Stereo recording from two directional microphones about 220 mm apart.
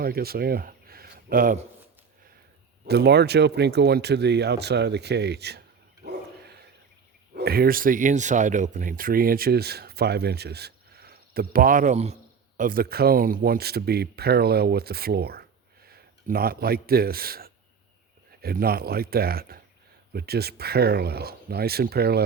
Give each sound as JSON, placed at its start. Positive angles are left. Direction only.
{"t": 0.0, "sound": "speech", "side_deg": -45}
{"t": 2.8, "sound": "speech", "side_deg": -45}
{"t": 7.3, "sound": "speech", "side_deg": -45}